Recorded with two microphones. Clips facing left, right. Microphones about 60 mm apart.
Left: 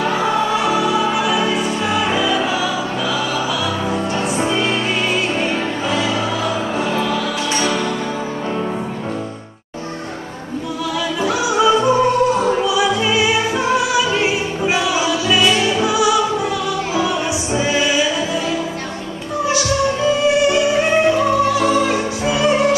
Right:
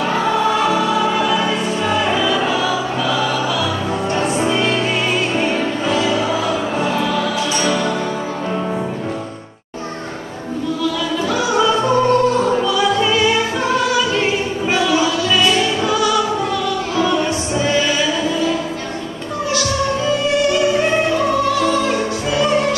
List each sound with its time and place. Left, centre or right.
0.7 s music: centre
4.4 s music: centre
11.2 s music: centre
16.9 s choir: centre
19.5 s music: centre
21.5 s opera: centre